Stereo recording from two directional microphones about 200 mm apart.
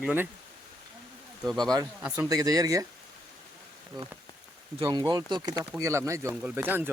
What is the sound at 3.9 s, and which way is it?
Speech, 20° right (ahead or behind).